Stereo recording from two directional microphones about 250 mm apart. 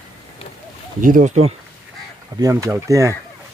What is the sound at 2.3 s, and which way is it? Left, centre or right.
Speech, centre.